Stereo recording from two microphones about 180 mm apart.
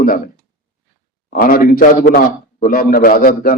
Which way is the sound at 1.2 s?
55° left (ahead or behind).